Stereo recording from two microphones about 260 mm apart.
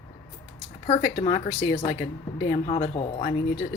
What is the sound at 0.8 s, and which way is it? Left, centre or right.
Speech, left.